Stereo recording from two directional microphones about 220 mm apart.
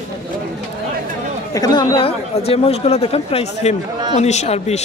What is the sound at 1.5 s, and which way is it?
Speech, 15° left (ahead or behind).